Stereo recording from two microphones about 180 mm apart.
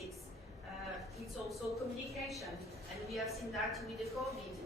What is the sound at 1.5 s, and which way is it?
A woman's voice, centre (ahead or behind).